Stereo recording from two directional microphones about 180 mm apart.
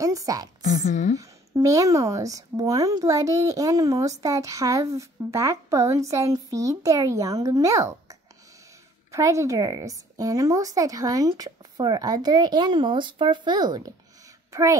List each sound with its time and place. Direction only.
0.0 s a woman's voice: 20° right (ahead or behind)
0.7 s a woman's voice: 45° left (ahead or behind)
1.1 s a woman's voice: 20° right (ahead or behind)